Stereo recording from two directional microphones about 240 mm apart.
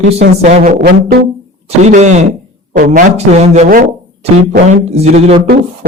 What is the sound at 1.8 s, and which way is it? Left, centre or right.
A man's voice, right.